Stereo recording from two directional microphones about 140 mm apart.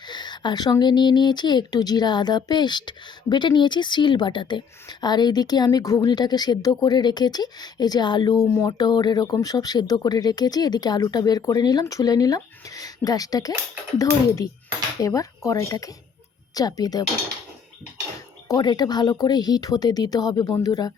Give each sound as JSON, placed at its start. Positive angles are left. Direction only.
{"t": 0.1, "sound": "a woman's voice", "side_deg": 30}
{"t": 18.4, "sound": "a woman's voice", "side_deg": 30}